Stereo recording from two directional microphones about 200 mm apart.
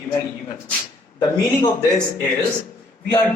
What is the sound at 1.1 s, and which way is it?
Speech, 25° left (ahead or behind).